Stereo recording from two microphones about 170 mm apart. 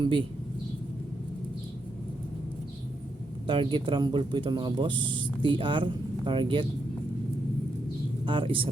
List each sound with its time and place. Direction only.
0.0 s speech: 30° right (ahead or behind)
3.4 s speech: 30° right (ahead or behind)
8.2 s speech: 30° right (ahead or behind)